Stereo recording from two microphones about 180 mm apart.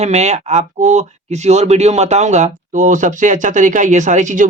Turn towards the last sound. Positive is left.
turn(degrees=-45)  # may be behind; listen again after turning